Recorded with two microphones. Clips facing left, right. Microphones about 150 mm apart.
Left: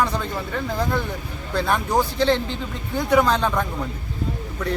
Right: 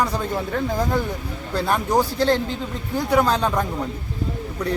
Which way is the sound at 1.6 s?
10° right (ahead or behind).